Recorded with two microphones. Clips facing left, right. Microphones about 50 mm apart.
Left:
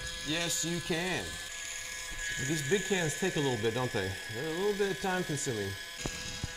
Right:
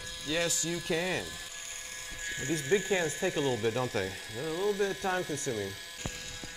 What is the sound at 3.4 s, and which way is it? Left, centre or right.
Speech, left.